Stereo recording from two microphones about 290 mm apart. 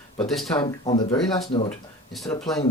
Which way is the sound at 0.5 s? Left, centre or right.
Centre.